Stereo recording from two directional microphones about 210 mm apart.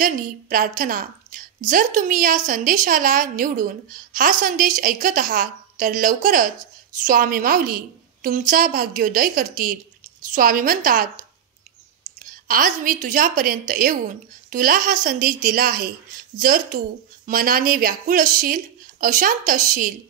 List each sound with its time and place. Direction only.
0.0 s a woman's voice: 40° right (ahead or behind)